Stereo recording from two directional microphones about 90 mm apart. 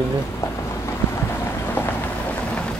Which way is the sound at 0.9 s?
25° left (ahead or behind).